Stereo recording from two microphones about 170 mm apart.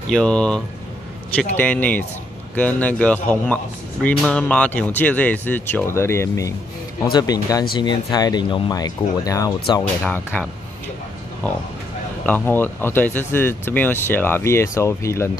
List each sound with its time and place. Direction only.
0.1 s speech: 5° left (ahead or behind)
1.6 s speech: 10° left (ahead or behind)
11.4 s speech: 10° left (ahead or behind)